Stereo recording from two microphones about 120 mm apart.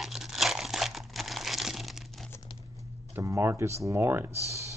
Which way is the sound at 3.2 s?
25° right (ahead or behind).